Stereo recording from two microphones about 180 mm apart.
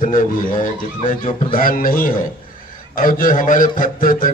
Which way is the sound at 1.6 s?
50° left (ahead or behind).